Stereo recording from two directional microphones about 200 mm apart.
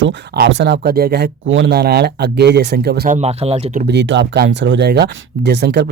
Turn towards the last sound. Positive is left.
turn(degrees=-55)  # may be behind; listen again after turning